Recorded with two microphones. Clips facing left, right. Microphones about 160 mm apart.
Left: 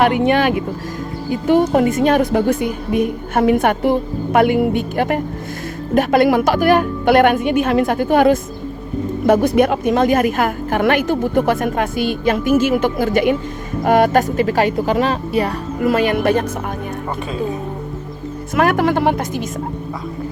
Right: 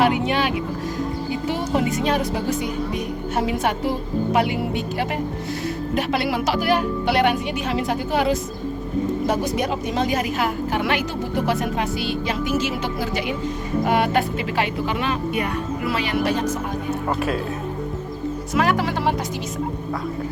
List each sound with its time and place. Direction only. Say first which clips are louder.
0.3 s a woman's voice: left 7 dB; 50° left (ahead or behind)
18.5 s a woman's voice: left 6 dB; 55° left (ahead or behind)